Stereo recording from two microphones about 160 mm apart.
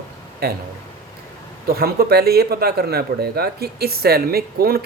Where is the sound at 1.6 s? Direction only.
70° right (ahead or behind).